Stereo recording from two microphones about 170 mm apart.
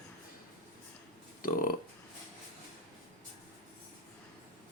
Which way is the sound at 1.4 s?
55° left (ahead or behind).